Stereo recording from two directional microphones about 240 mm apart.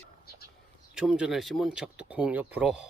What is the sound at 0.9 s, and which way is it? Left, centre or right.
Speech, centre.